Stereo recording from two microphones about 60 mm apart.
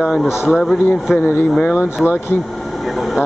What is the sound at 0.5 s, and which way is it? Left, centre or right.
A man's voice, centre.